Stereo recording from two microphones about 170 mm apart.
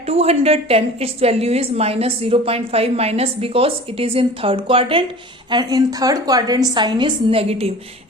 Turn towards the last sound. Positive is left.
turn(degrees=-35)  # may be behind; listen again after turning